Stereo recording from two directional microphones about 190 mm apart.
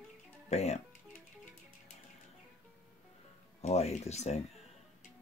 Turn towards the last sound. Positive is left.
turn(degrees=35)  # may be behind; listen again after turning